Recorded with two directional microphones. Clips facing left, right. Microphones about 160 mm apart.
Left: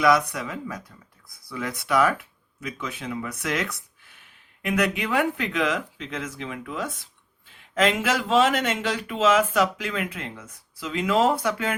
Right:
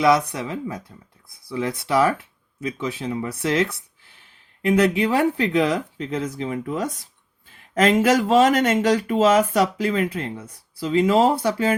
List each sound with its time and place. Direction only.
0.0 s speech: 25° right (ahead or behind)